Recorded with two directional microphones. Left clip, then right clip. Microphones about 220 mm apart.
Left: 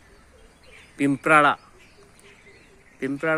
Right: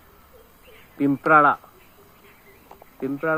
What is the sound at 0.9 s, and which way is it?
Speech, 20° left (ahead or behind).